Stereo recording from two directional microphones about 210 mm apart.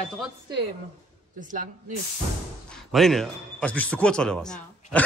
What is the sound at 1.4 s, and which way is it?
Speech, 40° right (ahead or behind).